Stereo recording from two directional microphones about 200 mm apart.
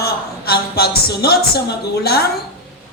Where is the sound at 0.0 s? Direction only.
50° left (ahead or behind).